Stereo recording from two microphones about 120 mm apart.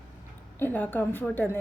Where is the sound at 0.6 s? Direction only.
15° left (ahead or behind).